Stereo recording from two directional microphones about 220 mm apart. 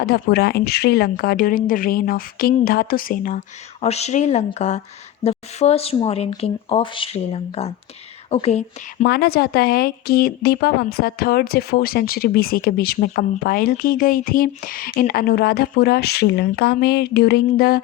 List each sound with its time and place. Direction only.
0.0 s speech: 45° left (ahead or behind); by 9.0 s 30° left (ahead or behind)
9.0 s speech: 45° left (ahead or behind)